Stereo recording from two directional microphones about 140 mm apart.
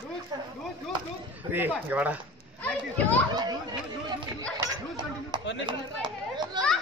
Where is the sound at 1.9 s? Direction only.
10° right (ahead or behind).